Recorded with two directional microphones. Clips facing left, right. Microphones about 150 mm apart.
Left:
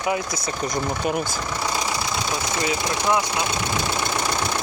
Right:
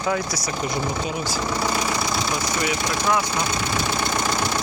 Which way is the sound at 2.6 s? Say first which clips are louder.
Left 1 dB; 20° left (ahead or behind).